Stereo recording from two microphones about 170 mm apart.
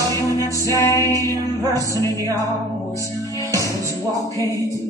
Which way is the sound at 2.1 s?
20° right (ahead or behind).